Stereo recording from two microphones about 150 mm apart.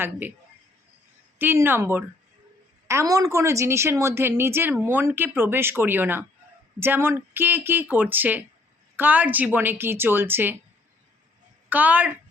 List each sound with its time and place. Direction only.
0.0 s a woman's voice: 15° right (ahead or behind)
1.4 s a woman's voice: 15° right (ahead or behind)
11.7 s a woman's voice: 10° right (ahead or behind)